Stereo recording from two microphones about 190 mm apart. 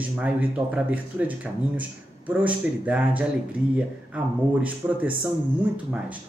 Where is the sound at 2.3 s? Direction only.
5° right (ahead or behind).